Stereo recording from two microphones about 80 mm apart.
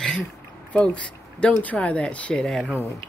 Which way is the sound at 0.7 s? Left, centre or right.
Centre.